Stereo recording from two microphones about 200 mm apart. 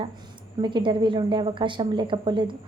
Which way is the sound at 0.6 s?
25° right (ahead or behind).